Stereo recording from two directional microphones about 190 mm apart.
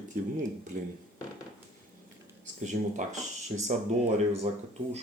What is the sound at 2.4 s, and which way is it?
Speech, 40° right (ahead or behind).